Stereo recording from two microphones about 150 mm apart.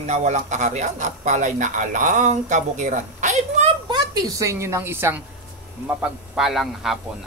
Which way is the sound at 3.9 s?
25° right (ahead or behind).